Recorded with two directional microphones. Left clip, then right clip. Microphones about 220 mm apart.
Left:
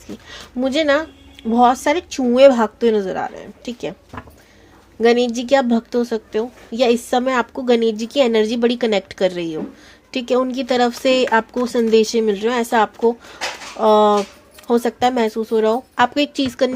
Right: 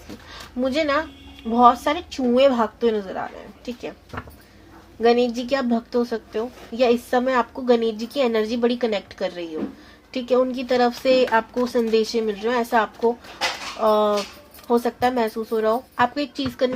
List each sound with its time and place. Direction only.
0.3 s speech: 50° left (ahead or behind)
4.9 s speech: 50° left (ahead or behind)